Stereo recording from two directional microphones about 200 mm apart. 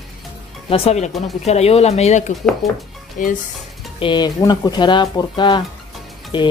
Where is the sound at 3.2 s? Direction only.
45° left (ahead or behind).